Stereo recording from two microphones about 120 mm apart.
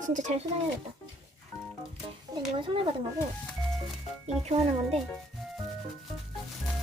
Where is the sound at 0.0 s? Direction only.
90° right.